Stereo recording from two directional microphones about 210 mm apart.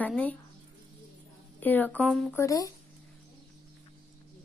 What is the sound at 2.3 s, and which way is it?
Speech, 15° left (ahead or behind).